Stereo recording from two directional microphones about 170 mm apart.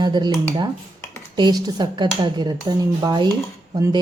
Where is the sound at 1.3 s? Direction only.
25° right (ahead or behind).